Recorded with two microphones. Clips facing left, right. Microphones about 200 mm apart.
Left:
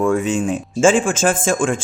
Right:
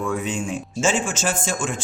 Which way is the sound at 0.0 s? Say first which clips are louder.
Left 8 dB; 50° left (ahead or behind).